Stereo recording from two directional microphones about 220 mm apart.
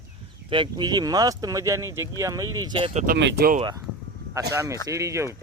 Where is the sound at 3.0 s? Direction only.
50° right (ahead or behind).